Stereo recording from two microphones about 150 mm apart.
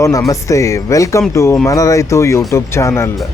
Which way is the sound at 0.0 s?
20° left (ahead or behind).